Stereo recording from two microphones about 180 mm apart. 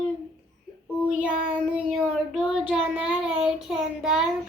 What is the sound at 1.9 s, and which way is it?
Child singing, 5° right (ahead or behind).